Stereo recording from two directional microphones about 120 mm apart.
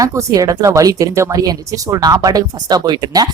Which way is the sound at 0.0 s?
25° right (ahead or behind).